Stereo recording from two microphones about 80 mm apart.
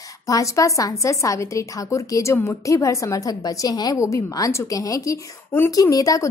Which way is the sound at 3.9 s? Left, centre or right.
Left.